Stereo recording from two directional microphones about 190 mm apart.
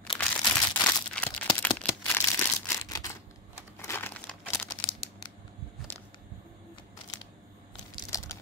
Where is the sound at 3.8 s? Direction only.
10° left (ahead or behind).